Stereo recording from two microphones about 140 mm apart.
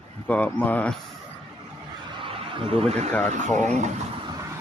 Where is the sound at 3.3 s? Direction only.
60° right (ahead or behind).